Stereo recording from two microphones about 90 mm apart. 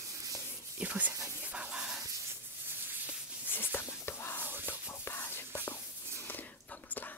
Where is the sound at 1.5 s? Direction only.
10° right (ahead or behind).